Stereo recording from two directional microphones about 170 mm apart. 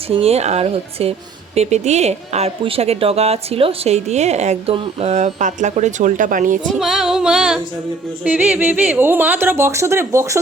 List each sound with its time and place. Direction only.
0.1 s a woman's voice: 35° right (ahead or behind)
6.7 s female singing: centre (ahead or behind)
8.2 s speech: 10° right (ahead or behind)